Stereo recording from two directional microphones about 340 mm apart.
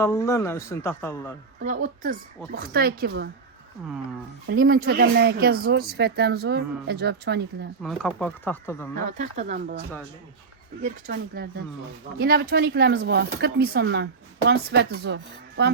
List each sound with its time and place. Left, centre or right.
0.0 s a man's voice: centre
1.6 s speech: right
4.4 s speech: right
7.8 s speech: centre
9.0 s speech: right
10.8 s speech: right